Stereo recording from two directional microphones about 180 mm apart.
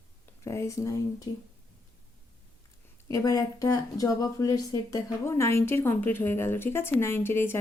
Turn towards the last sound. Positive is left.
turn(degrees=15)  # may be behind; listen again after turning